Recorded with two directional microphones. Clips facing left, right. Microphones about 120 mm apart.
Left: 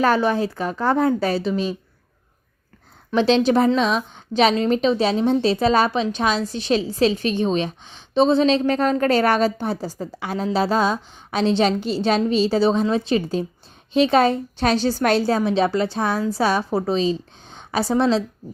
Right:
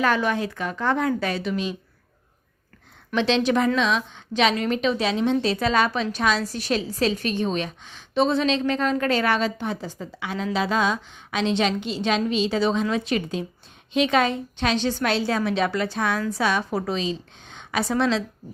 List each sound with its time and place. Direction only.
0.0 s a woman's voice: 35° left (ahead or behind)
3.2 s a woman's voice: 35° left (ahead or behind)
15.4 s a woman's voice: 30° left (ahead or behind)